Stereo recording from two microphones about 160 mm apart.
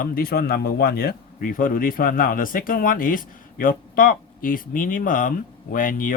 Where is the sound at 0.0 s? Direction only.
65° left (ahead or behind).